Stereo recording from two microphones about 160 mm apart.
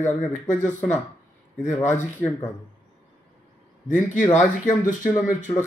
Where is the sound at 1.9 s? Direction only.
10° left (ahead or behind).